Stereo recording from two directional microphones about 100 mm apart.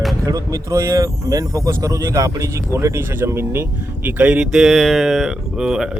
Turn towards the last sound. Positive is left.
turn(degrees=-5)  # may be behind; listen again after turning